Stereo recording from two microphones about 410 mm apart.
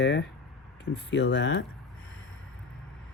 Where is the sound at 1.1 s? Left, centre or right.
Left.